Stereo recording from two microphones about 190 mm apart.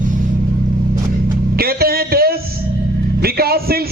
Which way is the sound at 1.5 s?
55° right (ahead or behind).